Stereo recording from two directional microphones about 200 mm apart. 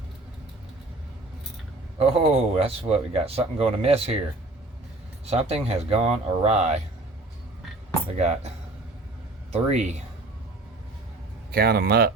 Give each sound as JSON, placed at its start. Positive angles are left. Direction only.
{"t": 2.0, "sound": "speech", "side_deg": -30}
{"t": 5.2, "sound": "speech", "side_deg": -30}
{"t": 9.5, "sound": "speech", "side_deg": -35}
{"t": 11.5, "sound": "speech", "side_deg": -50}